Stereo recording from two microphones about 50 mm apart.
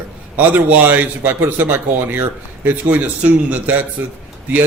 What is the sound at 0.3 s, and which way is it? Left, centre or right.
A man's voice, right.